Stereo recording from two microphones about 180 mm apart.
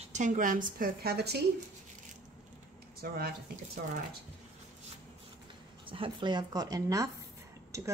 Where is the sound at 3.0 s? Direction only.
55° right (ahead or behind).